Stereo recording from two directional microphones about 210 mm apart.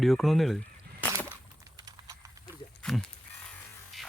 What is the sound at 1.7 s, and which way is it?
Typing, 20° right (ahead or behind).